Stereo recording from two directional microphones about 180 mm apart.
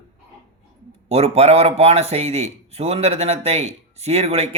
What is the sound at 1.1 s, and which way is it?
Speech, 35° right (ahead or behind).